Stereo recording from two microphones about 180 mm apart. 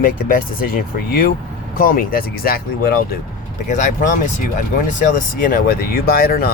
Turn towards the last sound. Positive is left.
turn(degrees=55)  # may be behind; listen again after turning